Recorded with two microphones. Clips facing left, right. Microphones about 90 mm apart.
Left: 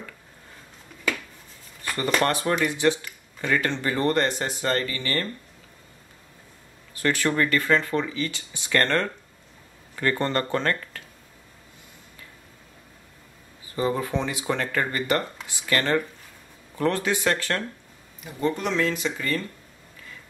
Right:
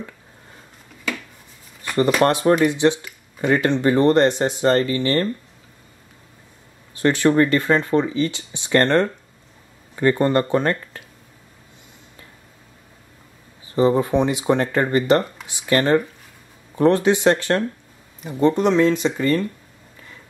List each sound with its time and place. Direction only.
2.2 s speech: 20° right (ahead or behind)
7.0 s speech: 25° right (ahead or behind)
13.7 s speech: 25° right (ahead or behind)